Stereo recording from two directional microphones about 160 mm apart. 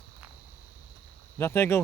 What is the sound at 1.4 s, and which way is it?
Speech, 15° left (ahead or behind).